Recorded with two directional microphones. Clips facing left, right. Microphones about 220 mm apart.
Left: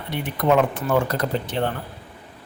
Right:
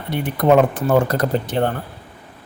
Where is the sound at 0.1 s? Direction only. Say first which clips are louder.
Right 5 dB; 45° right (ahead or behind).